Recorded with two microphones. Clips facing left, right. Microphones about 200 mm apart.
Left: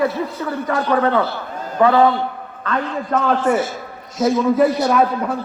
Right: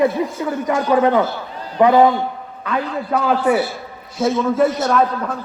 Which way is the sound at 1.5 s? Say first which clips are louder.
Left 3 dB; 45° left (ahead or behind).